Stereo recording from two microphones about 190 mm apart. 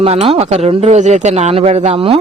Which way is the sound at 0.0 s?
30° right (ahead or behind).